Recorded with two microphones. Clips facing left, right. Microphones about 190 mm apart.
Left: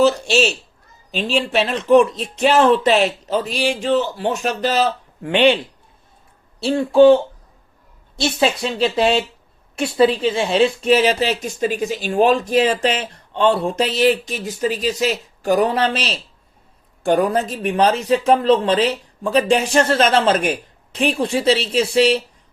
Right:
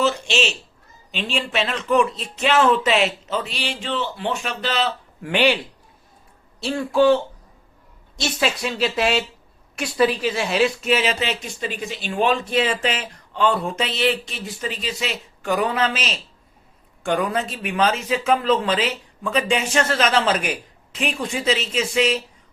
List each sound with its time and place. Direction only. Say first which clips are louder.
0.0 s speech: left 6 dB; 40° left (ahead or behind)
5.2 s speech: left 4 dB; 25° left (ahead or behind)
6.6 s speech: left 6 dB; 30° left (ahead or behind)